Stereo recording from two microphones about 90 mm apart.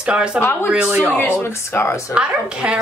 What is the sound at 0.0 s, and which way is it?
Speech, 10° right (ahead or behind).